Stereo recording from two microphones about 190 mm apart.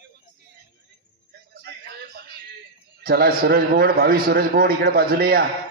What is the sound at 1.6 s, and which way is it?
Music, 60° right (ahead or behind).